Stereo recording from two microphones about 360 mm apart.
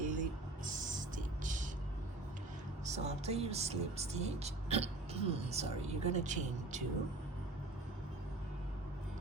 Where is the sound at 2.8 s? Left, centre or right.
Centre.